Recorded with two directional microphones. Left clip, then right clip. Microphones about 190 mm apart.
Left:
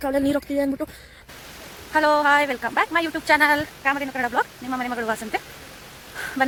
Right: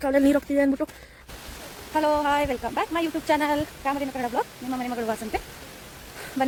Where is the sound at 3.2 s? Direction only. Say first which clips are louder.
Left 7 dB; 15° right (ahead or behind).